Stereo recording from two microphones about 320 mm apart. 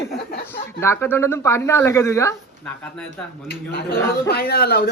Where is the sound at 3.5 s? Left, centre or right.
Left.